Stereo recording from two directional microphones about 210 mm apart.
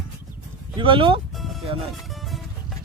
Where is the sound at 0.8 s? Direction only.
25° right (ahead or behind).